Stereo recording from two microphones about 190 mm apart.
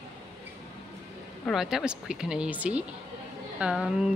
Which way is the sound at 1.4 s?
Centre (ahead or behind).